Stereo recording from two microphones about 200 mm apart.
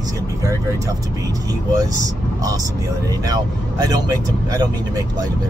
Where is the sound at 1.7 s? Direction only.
15° right (ahead or behind).